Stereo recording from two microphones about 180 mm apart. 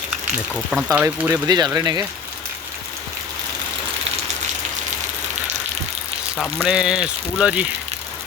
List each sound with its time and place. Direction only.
0.5 s speech: 5° right (ahead or behind); by 2.0 s 20° right (ahead or behind)
6.3 s a sound: 10° left (ahead or behind)
6.7 s speech: 5° right (ahead or behind)